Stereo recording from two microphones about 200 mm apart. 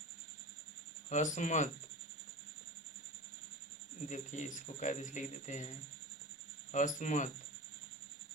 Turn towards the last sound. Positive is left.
turn(degrees=40)  # may be behind; listen again after turning